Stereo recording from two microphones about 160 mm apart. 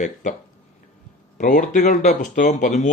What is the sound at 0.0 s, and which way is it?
Speech, 50° left (ahead or behind).